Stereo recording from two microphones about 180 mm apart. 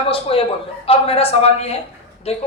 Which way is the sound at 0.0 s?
30° left (ahead or behind).